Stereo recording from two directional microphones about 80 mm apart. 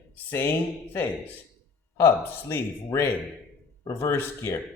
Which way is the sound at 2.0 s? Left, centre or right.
Left.